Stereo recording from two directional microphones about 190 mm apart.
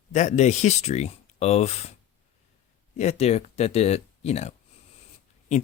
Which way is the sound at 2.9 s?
35° left (ahead or behind).